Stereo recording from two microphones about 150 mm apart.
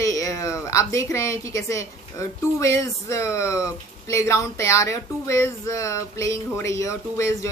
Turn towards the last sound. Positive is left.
turn(degrees=20)  # may be behind; listen again after turning